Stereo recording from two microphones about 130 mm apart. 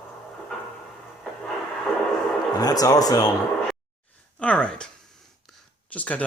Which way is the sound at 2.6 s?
30° left (ahead or behind).